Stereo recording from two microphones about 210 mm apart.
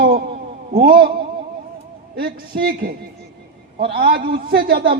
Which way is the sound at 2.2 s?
45° right (ahead or behind).